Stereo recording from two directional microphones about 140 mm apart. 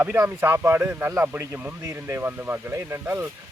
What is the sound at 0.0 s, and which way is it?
Speech, 15° right (ahead or behind).